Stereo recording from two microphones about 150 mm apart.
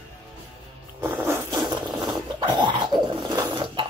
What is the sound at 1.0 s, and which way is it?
Zipper, 15° right (ahead or behind).